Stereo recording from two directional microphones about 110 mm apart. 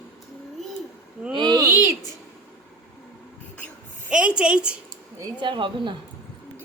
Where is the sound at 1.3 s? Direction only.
40° right (ahead or behind).